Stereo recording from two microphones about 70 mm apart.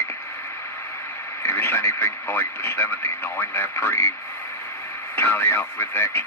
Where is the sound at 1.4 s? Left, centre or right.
Left.